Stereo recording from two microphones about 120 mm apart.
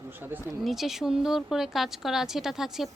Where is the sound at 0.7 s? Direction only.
Centre (ahead or behind).